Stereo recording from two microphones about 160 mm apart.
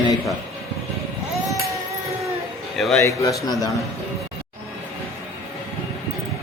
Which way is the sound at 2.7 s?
Centre (ahead or behind).